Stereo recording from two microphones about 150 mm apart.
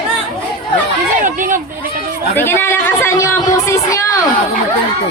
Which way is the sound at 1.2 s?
60° right (ahead or behind).